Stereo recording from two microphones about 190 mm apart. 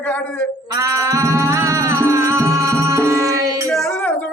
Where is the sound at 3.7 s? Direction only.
5° left (ahead or behind).